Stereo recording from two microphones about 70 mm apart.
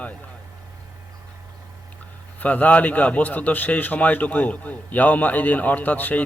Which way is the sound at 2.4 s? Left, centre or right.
Left.